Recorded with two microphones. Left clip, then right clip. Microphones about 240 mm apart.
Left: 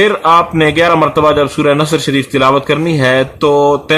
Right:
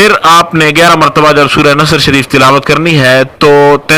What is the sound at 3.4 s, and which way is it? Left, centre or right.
Speech, right.